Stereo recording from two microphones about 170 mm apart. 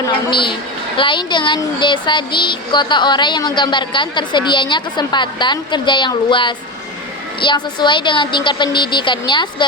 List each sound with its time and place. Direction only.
0.1 s speech: 30° left (ahead or behind)